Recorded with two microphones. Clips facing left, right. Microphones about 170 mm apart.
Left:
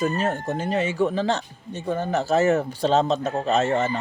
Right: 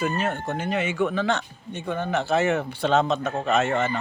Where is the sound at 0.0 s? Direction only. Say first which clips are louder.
Left 2 dB; 40° left (ahead or behind).